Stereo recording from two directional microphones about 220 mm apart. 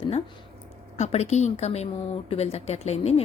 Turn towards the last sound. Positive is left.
turn(degrees=30)  # may be behind; listen again after turning